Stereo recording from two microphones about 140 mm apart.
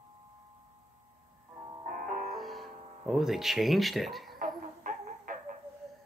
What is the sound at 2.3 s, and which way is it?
Music, centre (ahead or behind).